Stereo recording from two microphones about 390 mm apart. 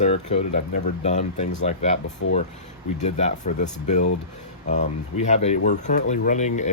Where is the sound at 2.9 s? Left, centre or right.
Centre.